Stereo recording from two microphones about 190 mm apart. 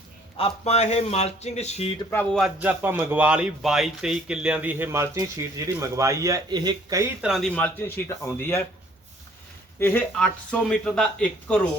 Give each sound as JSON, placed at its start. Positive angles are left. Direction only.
{"t": 0.3, "sound": "speech", "side_deg": 30}
{"t": 2.0, "sound": "speech", "side_deg": 10}
{"t": 2.4, "sound": "a man's voice", "side_deg": -10}
{"t": 7.2, "sound": "speech", "side_deg": 0}
{"t": 9.8, "sound": "speech", "side_deg": 10}